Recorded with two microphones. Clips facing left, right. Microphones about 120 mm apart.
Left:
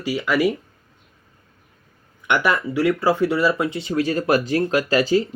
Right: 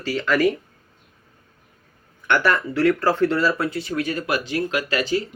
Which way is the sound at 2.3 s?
15° left (ahead or behind).